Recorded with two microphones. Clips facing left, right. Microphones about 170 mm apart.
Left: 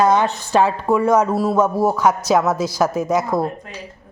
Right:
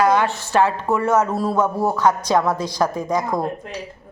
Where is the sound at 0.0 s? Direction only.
20° left (ahead or behind).